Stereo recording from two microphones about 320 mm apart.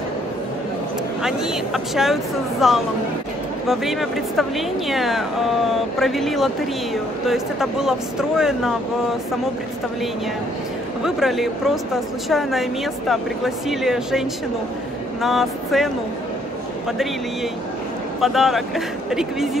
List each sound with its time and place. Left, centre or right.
1.2 s speech: centre
11.1 s speech: centre
15.2 s speech: centre
18.2 s speech: centre